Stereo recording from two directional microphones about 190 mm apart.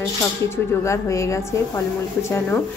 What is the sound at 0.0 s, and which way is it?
A woman's voice, 15° left (ahead or behind).